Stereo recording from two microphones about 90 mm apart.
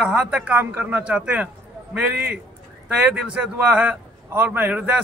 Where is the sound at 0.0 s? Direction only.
15° right (ahead or behind).